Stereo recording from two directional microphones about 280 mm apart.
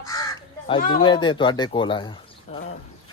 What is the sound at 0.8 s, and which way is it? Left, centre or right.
Speech, left.